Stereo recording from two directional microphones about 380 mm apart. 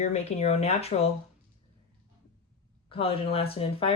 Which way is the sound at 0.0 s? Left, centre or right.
Centre.